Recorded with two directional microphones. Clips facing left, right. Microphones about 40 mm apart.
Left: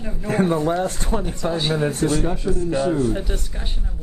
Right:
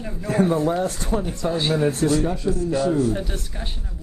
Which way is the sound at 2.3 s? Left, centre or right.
Left.